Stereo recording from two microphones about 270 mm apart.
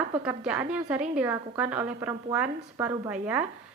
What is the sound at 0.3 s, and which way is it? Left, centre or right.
A woman's voice, centre.